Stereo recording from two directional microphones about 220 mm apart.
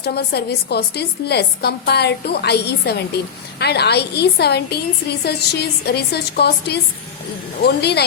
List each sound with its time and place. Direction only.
0.0 s a woman's voice: 45° left (ahead or behind)